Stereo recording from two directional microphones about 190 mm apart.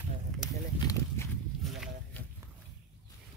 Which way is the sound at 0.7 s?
15° left (ahead or behind).